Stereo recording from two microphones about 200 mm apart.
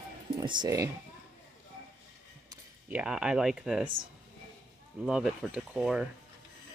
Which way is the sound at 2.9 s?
5° right (ahead or behind).